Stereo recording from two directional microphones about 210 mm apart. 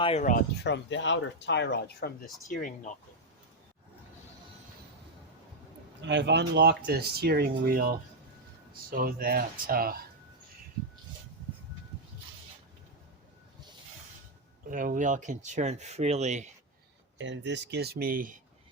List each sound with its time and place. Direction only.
0.0 s speech: 30° left (ahead or behind)
0.6 s speech: 60° left (ahead or behind); by 2.9 s 40° left (ahead or behind)
6.0 s speech: 55° right (ahead or behind)
9.0 s speech: 45° right (ahead or behind)
14.7 s speech: 40° right (ahead or behind)
17.2 s speech: 60° right (ahead or behind); by 18.3 s 40° right (ahead or behind)